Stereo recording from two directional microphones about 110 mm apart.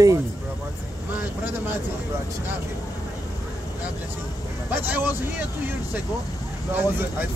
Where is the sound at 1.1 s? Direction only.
15° right (ahead or behind).